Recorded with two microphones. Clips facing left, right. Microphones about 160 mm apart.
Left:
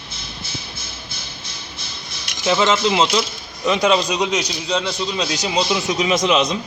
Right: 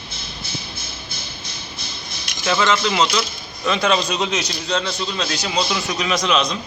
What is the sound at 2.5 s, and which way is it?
A man's voice, 20° left (ahead or behind).